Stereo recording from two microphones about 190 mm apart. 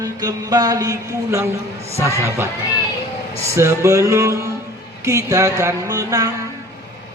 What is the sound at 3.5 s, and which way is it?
Mantra, 15° right (ahead or behind).